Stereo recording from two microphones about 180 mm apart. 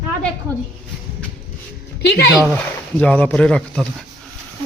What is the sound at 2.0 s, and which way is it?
Speech, 70° left (ahead or behind).